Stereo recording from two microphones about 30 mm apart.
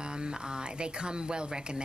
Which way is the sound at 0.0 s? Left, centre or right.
Right.